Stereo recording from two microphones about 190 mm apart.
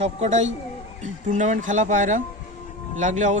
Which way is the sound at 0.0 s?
35° right (ahead or behind).